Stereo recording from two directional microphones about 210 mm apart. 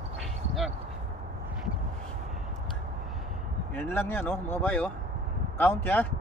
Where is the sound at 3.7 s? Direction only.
10° left (ahead or behind).